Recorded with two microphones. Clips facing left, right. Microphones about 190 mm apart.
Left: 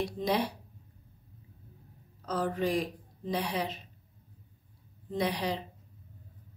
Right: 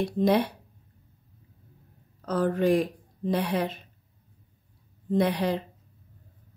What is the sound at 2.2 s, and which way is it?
Speech, 55° right (ahead or behind).